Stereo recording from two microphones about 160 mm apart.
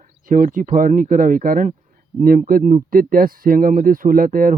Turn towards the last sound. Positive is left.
turn(degrees=-60)  # may be behind; listen again after turning